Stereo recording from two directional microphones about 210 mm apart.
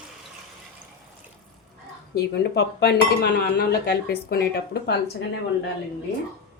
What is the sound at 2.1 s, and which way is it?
Speech, 50° left (ahead or behind).